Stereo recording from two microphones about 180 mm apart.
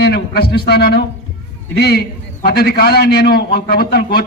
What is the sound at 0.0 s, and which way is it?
A man's voice, 60° left (ahead or behind).